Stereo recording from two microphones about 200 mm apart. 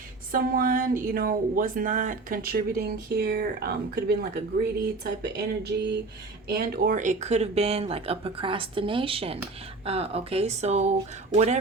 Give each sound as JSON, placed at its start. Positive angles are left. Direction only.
{"t": 0.3, "sound": "speech", "side_deg": -45}